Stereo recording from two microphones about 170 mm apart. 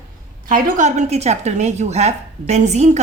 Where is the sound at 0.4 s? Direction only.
45° right (ahead or behind).